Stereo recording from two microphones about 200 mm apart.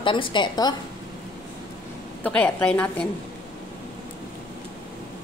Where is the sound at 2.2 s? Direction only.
5° left (ahead or behind).